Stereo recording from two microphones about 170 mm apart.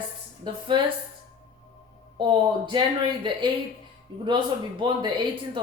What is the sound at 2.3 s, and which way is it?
Speech, 30° right (ahead or behind).